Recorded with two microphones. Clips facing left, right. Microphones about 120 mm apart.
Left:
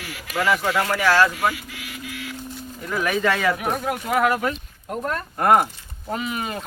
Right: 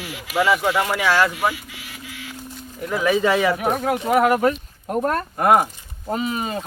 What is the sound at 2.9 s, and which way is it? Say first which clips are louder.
Speech: right 4 dB; 20° right (ahead or behind).